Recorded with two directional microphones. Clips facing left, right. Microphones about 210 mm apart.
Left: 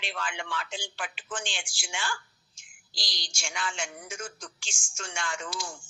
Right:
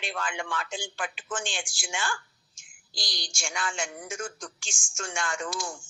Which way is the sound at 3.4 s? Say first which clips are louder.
Right 2 dB; 50° right (ahead or behind).